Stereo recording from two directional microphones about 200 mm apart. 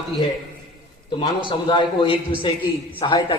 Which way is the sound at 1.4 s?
25° left (ahead or behind).